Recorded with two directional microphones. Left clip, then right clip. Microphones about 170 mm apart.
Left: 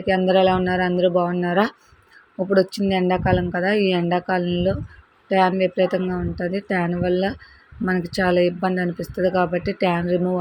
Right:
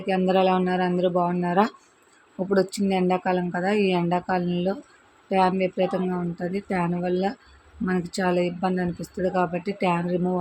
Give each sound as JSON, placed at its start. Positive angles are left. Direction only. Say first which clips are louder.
{"t": 0.0, "sound": "speech", "louder": "left 4 dB", "side_deg": 15}